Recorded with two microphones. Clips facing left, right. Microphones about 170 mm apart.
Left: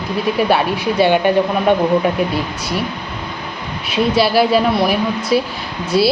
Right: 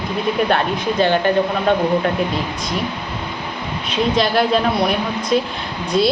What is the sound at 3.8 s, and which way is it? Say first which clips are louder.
A woman's voice: left 3 dB; 10° left (ahead or behind).